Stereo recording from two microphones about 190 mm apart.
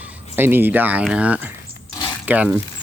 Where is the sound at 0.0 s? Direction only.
10° right (ahead or behind).